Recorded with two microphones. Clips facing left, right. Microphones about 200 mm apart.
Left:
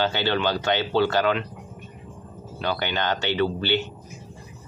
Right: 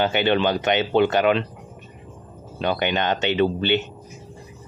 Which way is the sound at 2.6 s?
20° right (ahead or behind).